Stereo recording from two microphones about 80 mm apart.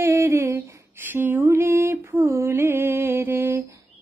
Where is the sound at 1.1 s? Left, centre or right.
Right.